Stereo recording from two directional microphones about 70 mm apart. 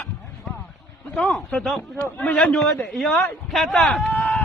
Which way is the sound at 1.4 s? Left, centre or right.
Centre.